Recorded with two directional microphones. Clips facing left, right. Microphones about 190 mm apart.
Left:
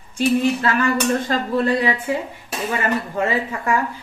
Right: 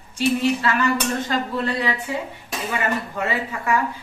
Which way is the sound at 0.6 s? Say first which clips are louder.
Left 2 dB; 45° left (ahead or behind).